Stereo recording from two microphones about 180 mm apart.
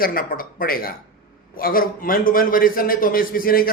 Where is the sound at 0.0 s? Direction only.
50° left (ahead or behind).